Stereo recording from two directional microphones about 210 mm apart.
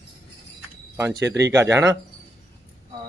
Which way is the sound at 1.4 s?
15° right (ahead or behind).